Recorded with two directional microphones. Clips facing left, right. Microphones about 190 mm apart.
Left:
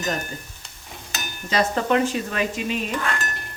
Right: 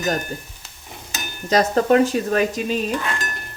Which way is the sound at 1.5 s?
40° right (ahead or behind).